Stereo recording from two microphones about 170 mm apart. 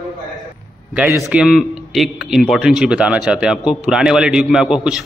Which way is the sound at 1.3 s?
Centre (ahead or behind).